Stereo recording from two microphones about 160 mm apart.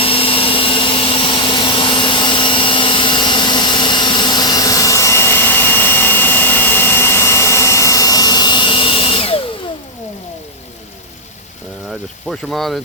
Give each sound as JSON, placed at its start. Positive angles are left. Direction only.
{"t": 0.0, "sound": "vacuum cleaner", "side_deg": 35}
{"t": 12.3, "sound": "speech", "side_deg": 0}